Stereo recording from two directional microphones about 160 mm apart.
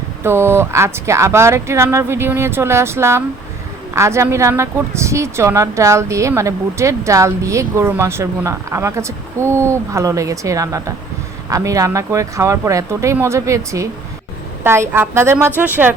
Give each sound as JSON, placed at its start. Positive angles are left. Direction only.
{"t": 0.2, "sound": "speech", "side_deg": -15}